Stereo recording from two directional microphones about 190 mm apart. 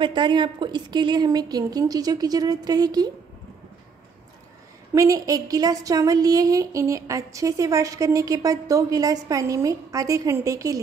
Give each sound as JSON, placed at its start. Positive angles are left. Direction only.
{"t": 0.0, "sound": "a woman's voice", "side_deg": -25}
{"t": 4.9, "sound": "a woman's voice", "side_deg": -15}